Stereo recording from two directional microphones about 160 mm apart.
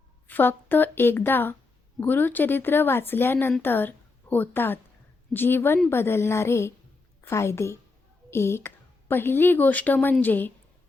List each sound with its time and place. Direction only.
0.3 s a woman's voice: 10° left (ahead or behind)